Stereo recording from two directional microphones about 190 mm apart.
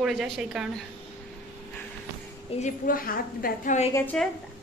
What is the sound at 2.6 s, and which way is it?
A woman's voice, 45° left (ahead or behind).